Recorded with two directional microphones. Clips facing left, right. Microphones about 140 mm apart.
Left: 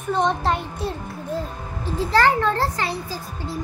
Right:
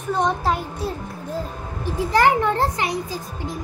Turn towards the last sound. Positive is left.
turn(degrees=-15)  # may be behind; listen again after turning